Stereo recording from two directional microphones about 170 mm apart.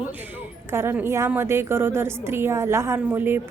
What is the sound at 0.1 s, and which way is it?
Speech, 10° right (ahead or behind).